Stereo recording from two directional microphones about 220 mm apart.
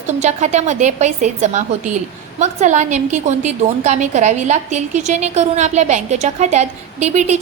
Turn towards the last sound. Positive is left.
turn(degrees=-30)  # may be behind; listen again after turning